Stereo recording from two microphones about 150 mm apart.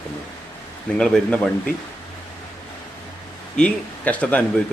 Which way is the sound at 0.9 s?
5° left (ahead or behind).